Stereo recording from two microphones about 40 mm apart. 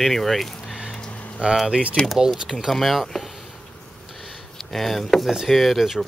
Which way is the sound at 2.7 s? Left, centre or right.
Centre.